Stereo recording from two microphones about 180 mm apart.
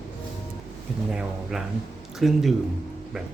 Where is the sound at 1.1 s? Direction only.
5° right (ahead or behind).